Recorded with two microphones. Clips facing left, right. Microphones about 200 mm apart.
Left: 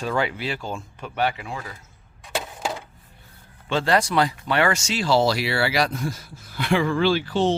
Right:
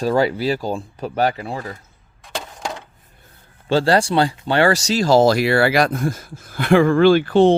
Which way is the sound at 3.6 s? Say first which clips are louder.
Right 5 dB; 35° right (ahead or behind).